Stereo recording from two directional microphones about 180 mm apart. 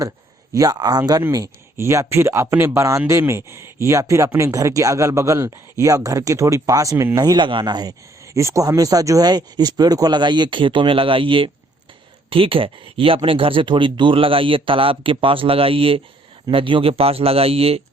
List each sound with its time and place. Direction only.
0.5 s a man's voice: 20° right (ahead or behind)